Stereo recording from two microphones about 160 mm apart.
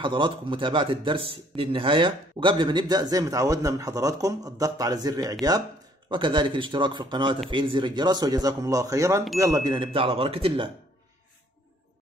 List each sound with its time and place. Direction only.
0.0 s speech: 30° right (ahead or behind)